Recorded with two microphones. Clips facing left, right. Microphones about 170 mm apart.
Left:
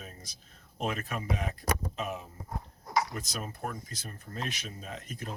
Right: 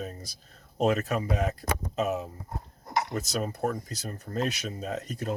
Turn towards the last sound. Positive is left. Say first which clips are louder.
# right 9 dB
turn(degrees=-40)  # may be behind; listen again after turning